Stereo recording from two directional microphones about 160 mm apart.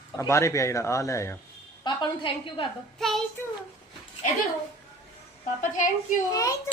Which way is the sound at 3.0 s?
Centre (ahead or behind).